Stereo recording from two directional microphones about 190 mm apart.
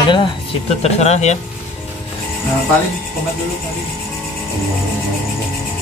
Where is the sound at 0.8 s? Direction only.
35° left (ahead or behind).